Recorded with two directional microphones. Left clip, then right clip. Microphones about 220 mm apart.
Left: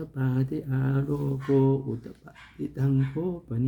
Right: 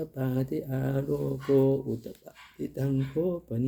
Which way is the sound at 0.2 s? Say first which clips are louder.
Left 1 dB; 20° left (ahead or behind).